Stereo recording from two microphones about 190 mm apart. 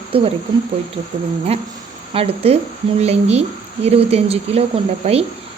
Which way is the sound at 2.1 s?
30° right (ahead or behind).